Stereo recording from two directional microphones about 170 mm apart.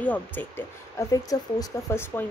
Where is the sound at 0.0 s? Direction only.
10° left (ahead or behind).